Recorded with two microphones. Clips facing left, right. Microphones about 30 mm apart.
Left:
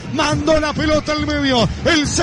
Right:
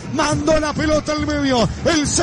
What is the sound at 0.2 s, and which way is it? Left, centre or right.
A man's voice, left.